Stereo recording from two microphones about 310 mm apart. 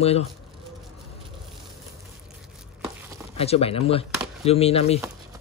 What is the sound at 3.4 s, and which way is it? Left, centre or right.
Speech, centre.